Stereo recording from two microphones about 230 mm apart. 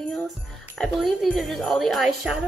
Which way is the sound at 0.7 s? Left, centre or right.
Centre.